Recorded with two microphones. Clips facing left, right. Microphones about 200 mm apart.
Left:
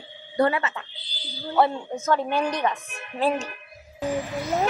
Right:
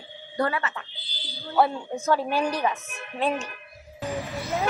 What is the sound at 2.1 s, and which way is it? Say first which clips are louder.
Speech: even; 10° right (ahead or behind).